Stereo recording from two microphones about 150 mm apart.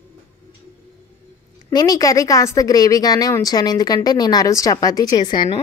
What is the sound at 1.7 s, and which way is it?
A woman's voice, 25° left (ahead or behind).